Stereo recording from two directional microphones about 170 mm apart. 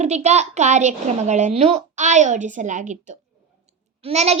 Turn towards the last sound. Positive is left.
turn(degrees=-40)  # may be behind; listen again after turning